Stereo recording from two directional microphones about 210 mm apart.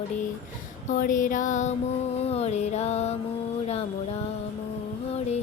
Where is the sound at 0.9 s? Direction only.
40° left (ahead or behind).